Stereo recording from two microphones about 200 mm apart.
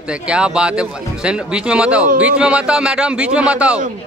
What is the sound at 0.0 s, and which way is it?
Speech, 5° right (ahead or behind).